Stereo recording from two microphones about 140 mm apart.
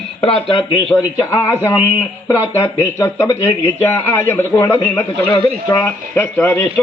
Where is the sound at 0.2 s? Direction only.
40° left (ahead or behind).